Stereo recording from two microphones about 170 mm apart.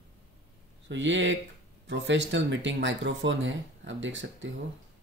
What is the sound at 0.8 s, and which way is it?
Speech, 90° right.